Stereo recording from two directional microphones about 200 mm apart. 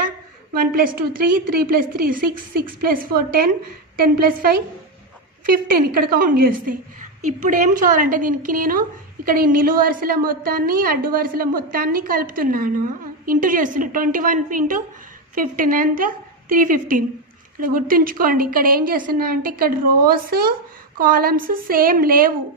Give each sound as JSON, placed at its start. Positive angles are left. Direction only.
{"t": 0.6, "sound": "a woman's voice", "side_deg": -45}